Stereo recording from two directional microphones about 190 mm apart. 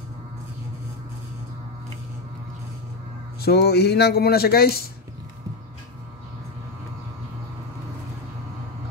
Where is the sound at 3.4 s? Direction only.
60° left (ahead or behind).